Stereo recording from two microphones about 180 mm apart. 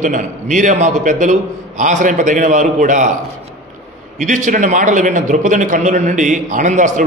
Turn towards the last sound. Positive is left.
turn(degrees=-45)  # may be behind; listen again after turning